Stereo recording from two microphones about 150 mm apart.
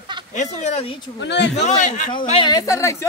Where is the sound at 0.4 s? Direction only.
50° left (ahead or behind).